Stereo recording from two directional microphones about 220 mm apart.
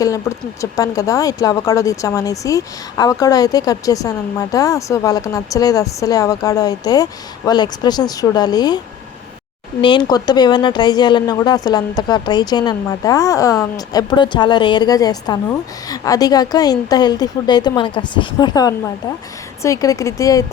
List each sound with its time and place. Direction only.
0.0 s speech: 15° left (ahead or behind)
9.8 s speech: 20° left (ahead or behind)